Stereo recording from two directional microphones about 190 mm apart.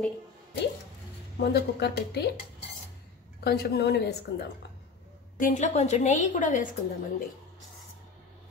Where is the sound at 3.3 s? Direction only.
55° left (ahead or behind).